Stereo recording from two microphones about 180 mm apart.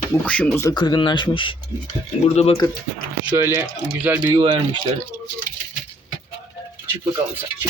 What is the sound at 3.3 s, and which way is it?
Speech, 10° right (ahead or behind).